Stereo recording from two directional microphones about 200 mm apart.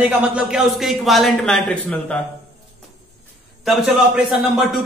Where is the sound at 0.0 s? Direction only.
5° right (ahead or behind).